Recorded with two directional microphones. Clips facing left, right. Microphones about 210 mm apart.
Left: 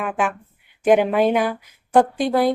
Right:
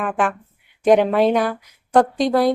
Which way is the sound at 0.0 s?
5° left (ahead or behind).